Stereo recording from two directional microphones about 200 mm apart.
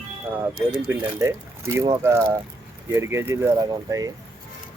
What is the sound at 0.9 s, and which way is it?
Speech, 10° right (ahead or behind).